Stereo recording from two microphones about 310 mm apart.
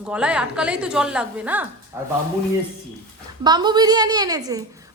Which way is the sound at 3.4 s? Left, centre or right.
Centre.